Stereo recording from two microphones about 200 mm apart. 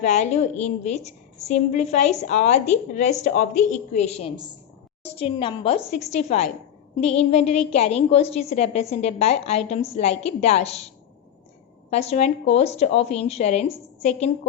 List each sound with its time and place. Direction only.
0.0 s a woman's voice: 35° left (ahead or behind)
11.9 s a woman's voice: 30° left (ahead or behind)